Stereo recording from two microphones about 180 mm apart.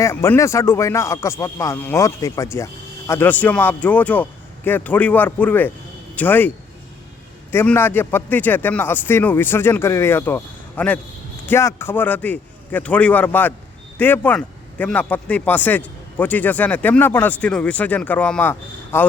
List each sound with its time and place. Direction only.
0.0 s a man's voice: 15° left (ahead or behind)
7.5 s a man's voice: 10° left (ahead or behind)